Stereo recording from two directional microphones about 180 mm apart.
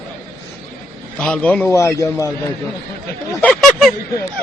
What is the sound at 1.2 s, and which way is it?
A man's voice, 5° left (ahead or behind).